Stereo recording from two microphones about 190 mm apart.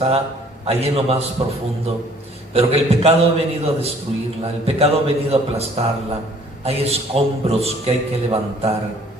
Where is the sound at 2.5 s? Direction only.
30° right (ahead or behind).